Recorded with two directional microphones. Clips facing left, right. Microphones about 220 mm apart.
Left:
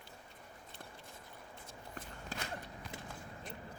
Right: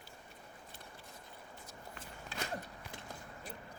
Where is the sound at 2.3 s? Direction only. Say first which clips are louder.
Right 1 dB; 45° left (ahead or behind).